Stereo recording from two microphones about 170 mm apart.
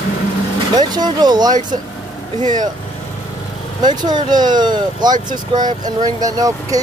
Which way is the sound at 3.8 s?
25° right (ahead or behind).